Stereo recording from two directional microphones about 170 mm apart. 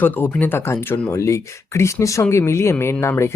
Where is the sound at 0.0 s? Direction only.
10° left (ahead or behind).